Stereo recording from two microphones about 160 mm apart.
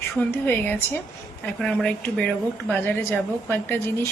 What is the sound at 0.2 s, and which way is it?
Speech, 10° left (ahead or behind).